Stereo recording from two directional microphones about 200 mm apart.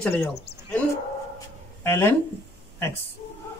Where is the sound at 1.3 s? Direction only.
15° left (ahead or behind).